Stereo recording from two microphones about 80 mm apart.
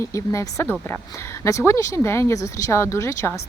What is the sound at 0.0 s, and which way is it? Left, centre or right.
A woman's voice, left.